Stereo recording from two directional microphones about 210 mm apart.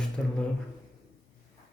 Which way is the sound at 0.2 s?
5° left (ahead or behind).